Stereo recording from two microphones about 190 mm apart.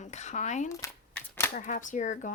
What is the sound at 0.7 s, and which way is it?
Shuffling cards, 15° left (ahead or behind).